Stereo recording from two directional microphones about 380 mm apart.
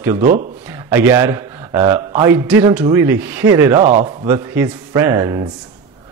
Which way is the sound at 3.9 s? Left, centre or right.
Centre.